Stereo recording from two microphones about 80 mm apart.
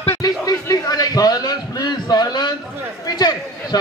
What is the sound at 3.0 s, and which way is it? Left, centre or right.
Chatter, left.